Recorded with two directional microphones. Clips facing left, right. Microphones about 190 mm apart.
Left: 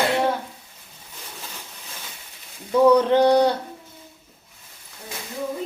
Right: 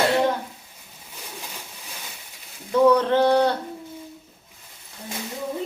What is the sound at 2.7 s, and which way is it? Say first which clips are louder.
Speech: left 2 dB; 10° left (ahead or behind).